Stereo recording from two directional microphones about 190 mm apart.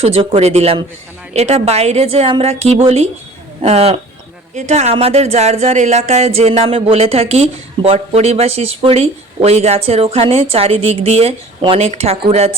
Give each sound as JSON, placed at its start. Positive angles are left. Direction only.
{"t": 0.0, "sound": "speech", "side_deg": -30}